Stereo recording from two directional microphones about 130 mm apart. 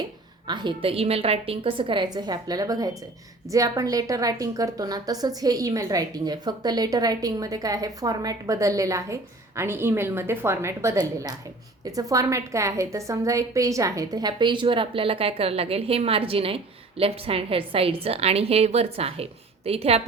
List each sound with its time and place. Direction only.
0.4 s a woman's voice: 35° right (ahead or behind)